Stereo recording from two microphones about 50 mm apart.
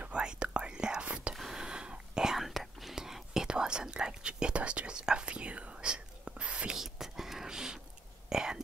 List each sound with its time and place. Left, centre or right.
0.0 s whispering: right
1.3 s whispering: centre
2.3 s whispering: centre; by 6.8 s right
6.8 s whispering: centre